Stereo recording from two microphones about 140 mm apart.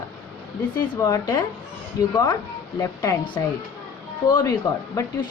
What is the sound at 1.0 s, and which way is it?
A woman's voice, 25° left (ahead or behind).